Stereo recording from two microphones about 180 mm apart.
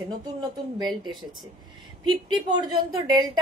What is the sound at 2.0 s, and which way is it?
A woman's voice, 25° right (ahead or behind).